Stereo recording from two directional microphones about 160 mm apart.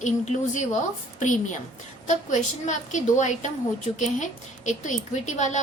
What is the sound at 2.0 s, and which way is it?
A woman's voice, 50° left (ahead or behind).